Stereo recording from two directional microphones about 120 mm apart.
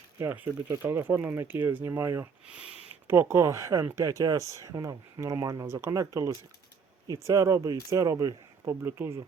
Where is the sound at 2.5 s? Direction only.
5° right (ahead or behind).